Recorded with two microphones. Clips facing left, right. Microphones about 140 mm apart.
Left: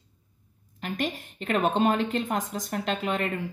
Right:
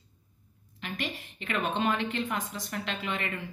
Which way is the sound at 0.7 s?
45° left (ahead or behind).